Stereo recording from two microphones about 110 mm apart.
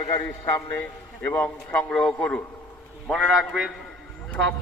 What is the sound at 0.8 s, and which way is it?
A man's voice, 15° left (ahead or behind).